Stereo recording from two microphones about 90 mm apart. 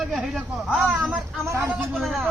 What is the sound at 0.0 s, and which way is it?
Speech, 5° right (ahead or behind).